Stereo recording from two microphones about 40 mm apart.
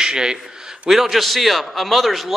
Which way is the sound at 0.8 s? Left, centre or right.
Centre.